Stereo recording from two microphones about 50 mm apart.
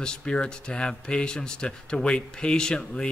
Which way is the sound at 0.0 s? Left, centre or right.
Centre.